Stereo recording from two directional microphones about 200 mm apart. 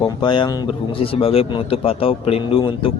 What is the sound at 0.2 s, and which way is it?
A man's voice, 20° left (ahead or behind).